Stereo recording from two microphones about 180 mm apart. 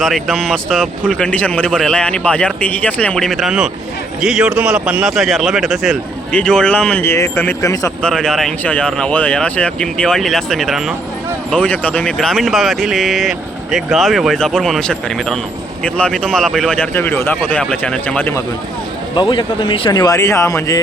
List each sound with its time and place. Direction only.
0.0 s speech: centre (ahead or behind); by 7.9 s 20° left (ahead or behind)
8.0 s speech: 5° left (ahead or behind)
19.1 s speech: 25° left (ahead or behind)